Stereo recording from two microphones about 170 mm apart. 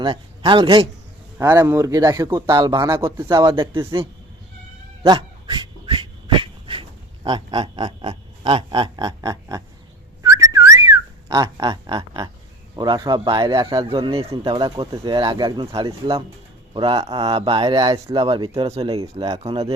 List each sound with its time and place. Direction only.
0.0 s a man's voice: 30° right (ahead or behind)
1.4 s speech: 15° right (ahead or behind)
5.0 s dog: 25° right (ahead or behind)
7.3 s speech: 25° right (ahead or behind)
10.2 s whistling: 20° right (ahead or behind)
12.7 s speech: 25° right (ahead or behind)
13.8 s speech: 35° right (ahead or behind)